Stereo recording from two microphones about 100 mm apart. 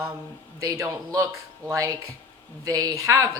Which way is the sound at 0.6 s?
35° right (ahead or behind).